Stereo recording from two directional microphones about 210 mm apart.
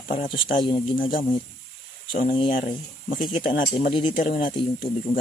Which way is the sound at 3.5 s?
45° left (ahead or behind).